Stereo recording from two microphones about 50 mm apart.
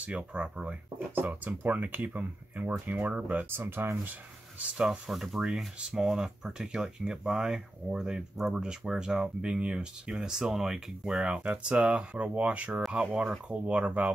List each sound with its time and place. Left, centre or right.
0.0 s speech: right
0.9 s speech: right
3.4 s speech: right
4.6 s speech: right
4.8 s speech: centre; by 14.1 s right